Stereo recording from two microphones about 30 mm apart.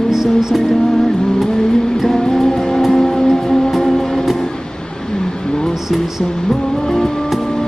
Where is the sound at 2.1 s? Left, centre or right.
Centre.